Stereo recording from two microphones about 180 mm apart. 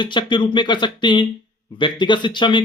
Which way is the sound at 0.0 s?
25° left (ahead or behind).